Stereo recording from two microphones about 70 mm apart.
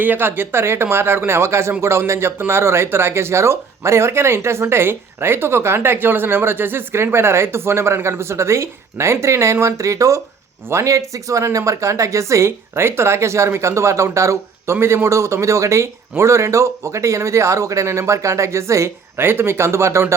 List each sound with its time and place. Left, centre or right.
0.0 s speech: right